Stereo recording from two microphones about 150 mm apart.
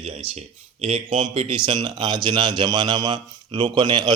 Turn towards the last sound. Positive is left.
turn(degrees=-30)  # may be behind; listen again after turning